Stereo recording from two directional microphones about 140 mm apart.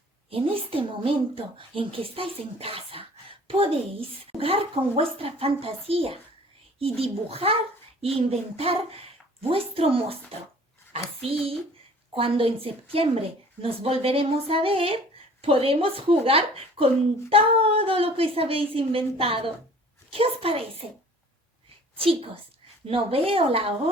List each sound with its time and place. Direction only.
0.3 s a woman's voice: 40° right (ahead or behind)
12.1 s speech: 40° right (ahead or behind)
21.9 s a woman's voice: 40° right (ahead or behind)